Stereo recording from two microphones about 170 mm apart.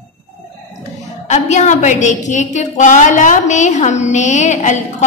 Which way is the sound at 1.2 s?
40° left (ahead or behind).